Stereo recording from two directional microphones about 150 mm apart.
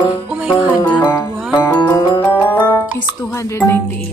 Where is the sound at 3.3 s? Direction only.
20° left (ahead or behind).